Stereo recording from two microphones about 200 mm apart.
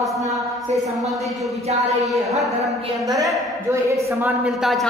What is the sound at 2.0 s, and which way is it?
Speech, centre (ahead or behind).